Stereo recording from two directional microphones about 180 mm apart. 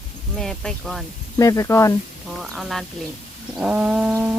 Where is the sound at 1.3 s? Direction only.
20° left (ahead or behind).